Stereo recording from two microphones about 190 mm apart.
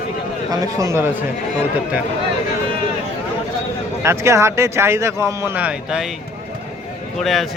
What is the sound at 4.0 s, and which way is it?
Speech, 15° right (ahead or behind).